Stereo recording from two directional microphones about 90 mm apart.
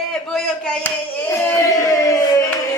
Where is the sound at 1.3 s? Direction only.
35° left (ahead or behind).